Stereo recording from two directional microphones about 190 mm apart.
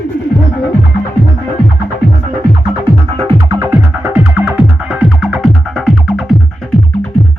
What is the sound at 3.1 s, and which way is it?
Music, 30° right (ahead or behind).